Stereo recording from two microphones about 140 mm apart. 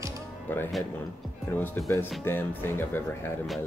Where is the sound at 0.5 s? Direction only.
15° left (ahead or behind).